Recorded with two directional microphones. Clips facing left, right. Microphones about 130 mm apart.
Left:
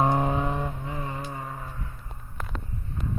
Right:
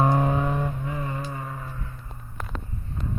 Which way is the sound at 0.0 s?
15° left (ahead or behind).